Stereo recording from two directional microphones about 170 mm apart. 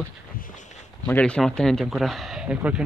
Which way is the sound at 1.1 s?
5° left (ahead or behind).